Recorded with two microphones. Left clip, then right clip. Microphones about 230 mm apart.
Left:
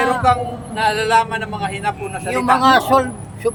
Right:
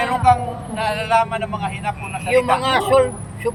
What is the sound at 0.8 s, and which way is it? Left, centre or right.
A man's voice, left.